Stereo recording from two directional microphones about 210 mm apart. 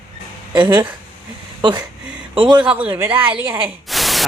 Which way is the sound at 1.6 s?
20° right (ahead or behind).